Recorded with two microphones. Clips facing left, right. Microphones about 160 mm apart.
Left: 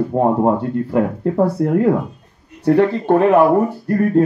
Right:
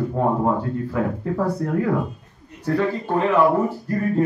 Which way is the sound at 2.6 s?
70° left (ahead or behind).